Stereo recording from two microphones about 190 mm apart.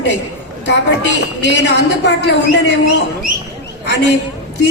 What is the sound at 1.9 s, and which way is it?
Speech, 65° left (ahead or behind).